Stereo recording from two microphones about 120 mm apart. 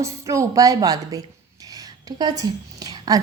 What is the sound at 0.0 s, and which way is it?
A woman's voice, 25° right (ahead or behind).